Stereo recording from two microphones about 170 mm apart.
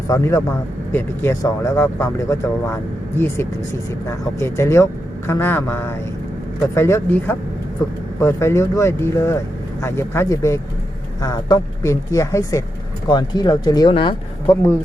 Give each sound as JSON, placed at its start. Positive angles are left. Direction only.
{"t": 0.1, "sound": "a woman's voice", "side_deg": 15}
{"t": 14.5, "sound": "speech", "side_deg": 15}